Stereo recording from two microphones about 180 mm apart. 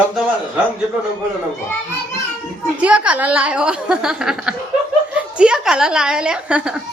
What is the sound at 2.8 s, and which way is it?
A woman's voice, 5° right (ahead or behind).